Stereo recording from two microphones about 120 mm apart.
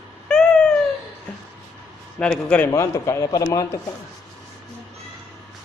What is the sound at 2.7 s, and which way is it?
A man's voice, 25° left (ahead or behind).